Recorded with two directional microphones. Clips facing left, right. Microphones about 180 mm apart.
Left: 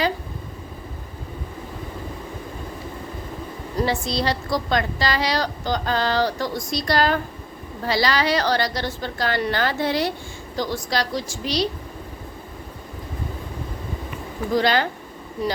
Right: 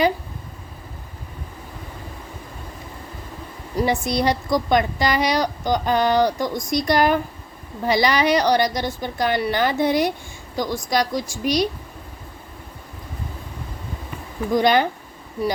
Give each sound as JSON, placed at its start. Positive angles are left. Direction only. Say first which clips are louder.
{"t": 3.8, "sound": "a woman's voice", "louder": "right 3 dB", "side_deg": -15}
{"t": 14.5, "sound": "a woman's voice", "louder": "right 3 dB", "side_deg": -15}